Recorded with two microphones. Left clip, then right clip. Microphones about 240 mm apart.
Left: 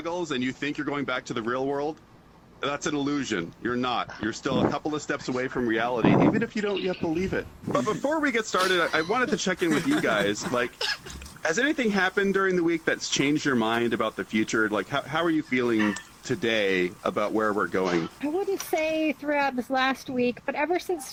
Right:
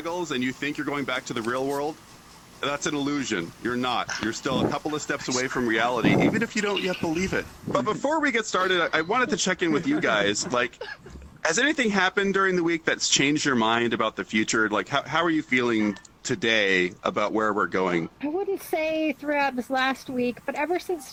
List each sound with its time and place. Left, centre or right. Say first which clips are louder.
0.0 s speech: right 1 dB; centre
6.1 s speech: left 3 dB; left
6.3 s speech: right 2 dB; right
10.8 s speech: left 8 dB; left
11.4 s speech: right 2 dB; right
18.2 s speech: even; centre